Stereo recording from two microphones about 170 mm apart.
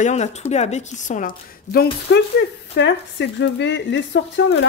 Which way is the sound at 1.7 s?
75° left (ahead or behind).